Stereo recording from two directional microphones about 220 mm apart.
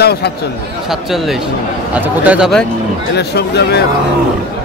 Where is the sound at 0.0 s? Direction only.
45° left (ahead or behind).